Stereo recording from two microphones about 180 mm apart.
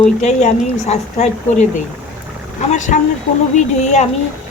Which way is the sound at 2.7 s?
40° left (ahead or behind).